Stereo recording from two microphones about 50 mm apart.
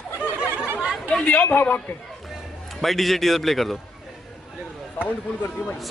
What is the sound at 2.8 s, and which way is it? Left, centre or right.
Speech, centre.